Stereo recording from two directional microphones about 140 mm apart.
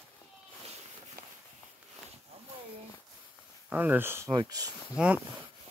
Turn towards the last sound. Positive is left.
turn(degrees=-5)  # may be behind; listen again after turning